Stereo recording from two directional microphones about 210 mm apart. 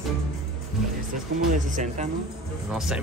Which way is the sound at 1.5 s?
35° right (ahead or behind).